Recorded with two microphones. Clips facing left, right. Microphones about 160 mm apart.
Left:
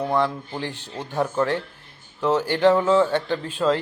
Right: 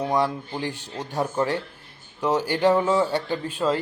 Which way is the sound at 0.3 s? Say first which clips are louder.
Right 1 dB; 5° right (ahead or behind).